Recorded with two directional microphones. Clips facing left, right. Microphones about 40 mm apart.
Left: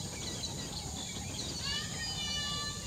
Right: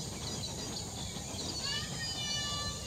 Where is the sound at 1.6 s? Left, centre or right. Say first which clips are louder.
Left 1 dB; centre.